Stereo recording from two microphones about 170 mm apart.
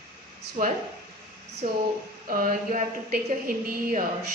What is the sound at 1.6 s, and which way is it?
Speech, 45° right (ahead or behind).